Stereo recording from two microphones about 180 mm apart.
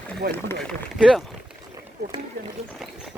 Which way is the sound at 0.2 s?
55° right (ahead or behind).